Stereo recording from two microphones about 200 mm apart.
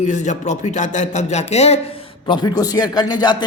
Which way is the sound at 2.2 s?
20° left (ahead or behind).